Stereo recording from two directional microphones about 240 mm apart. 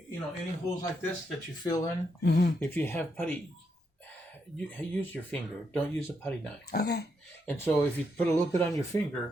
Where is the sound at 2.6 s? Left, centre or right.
Centre.